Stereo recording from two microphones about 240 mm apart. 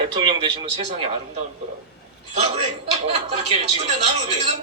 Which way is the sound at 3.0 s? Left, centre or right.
Right.